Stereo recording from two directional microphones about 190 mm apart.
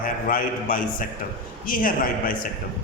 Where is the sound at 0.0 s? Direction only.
45° left (ahead or behind).